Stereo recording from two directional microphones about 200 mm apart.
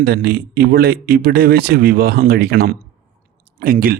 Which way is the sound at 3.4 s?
45° right (ahead or behind).